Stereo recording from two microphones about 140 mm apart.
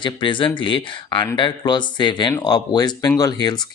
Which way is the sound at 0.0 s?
35° left (ahead or behind).